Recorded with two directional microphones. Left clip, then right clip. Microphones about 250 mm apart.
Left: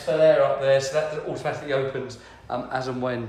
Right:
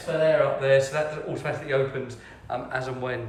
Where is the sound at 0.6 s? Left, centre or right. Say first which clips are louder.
Left 1 dB; centre.